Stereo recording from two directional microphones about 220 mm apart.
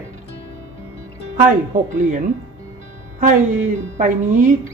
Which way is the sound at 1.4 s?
35° right (ahead or behind).